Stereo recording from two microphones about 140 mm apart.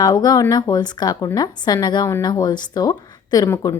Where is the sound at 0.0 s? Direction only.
25° left (ahead or behind).